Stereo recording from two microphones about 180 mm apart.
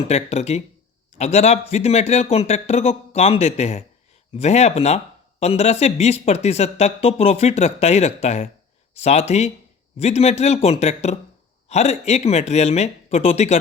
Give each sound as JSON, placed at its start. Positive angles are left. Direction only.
{"t": 0.1, "sound": "speech", "side_deg": 35}